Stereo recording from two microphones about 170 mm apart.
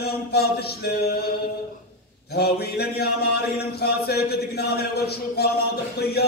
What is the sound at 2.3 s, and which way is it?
A man's voice, 70° left (ahead or behind).